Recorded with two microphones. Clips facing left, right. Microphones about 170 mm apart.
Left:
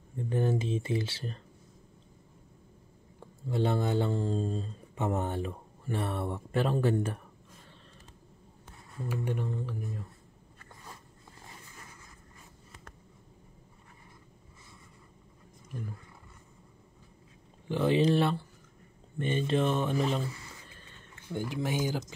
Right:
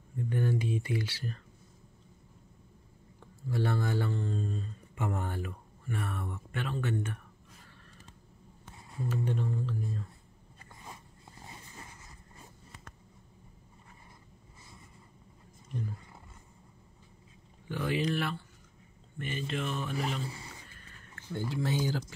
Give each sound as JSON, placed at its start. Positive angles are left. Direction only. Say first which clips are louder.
{"t": 0.2, "sound": "speech", "louder": "left 2 dB", "side_deg": 25}
{"t": 3.2, "sound": "speech", "louder": "left 3 dB", "side_deg": 20}
{"t": 4.1, "sound": "speech", "louder": "left 4 dB", "side_deg": 30}
{"t": 9.1, "sound": "music", "louder": "even", "side_deg": 15}
{"t": 17.6, "sound": "speech", "louder": "left 6 dB", "side_deg": 25}
{"t": 21.3, "sound": "music", "louder": "even", "side_deg": 15}